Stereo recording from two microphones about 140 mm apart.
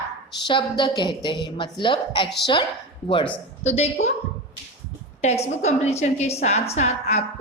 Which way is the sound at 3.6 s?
50° left (ahead or behind).